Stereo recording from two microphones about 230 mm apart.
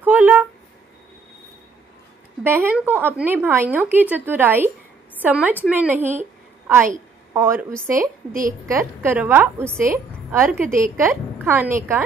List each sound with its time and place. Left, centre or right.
0.0 s a sound: centre
2.4 s a woman's voice: centre
7.3 s a woman's voice: centre
8.3 s a woman's voice: right
8.6 s a woman's voice: centre